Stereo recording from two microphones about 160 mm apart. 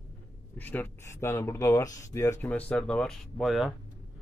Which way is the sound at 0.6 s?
10° left (ahead or behind).